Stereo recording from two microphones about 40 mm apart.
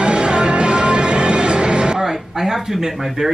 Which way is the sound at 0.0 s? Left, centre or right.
Right.